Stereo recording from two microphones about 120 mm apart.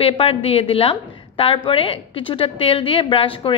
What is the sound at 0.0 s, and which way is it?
A woman's voice, 55° left (ahead or behind).